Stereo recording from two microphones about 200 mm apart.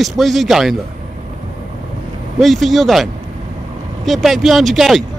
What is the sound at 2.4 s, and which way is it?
Speech, centre (ahead or behind).